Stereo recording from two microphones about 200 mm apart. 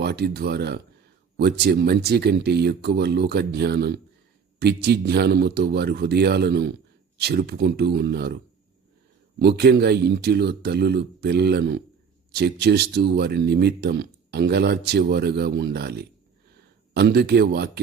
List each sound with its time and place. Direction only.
0.0 s speech: 55° right (ahead or behind)
9.4 s speech: 55° right (ahead or behind)